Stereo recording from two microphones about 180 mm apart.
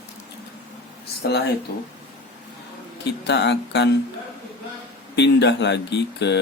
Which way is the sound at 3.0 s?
70° left (ahead or behind).